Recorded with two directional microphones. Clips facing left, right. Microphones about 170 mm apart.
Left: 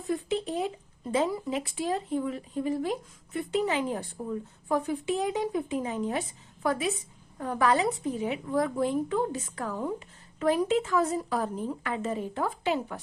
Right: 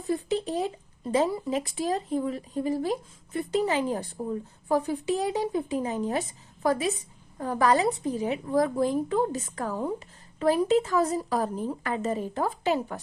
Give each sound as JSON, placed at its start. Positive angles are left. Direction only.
{"t": 0.1, "sound": "a woman's voice", "side_deg": -40}